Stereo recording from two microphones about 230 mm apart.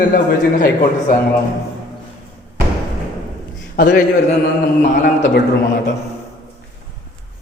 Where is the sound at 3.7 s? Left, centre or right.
Left.